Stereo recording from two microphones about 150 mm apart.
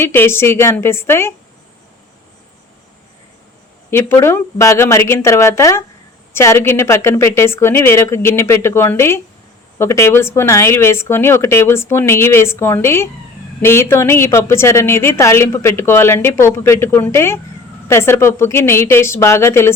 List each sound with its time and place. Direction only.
0.0 s a woman's voice: 15° left (ahead or behind)
3.9 s a woman's voice: 15° left (ahead or behind)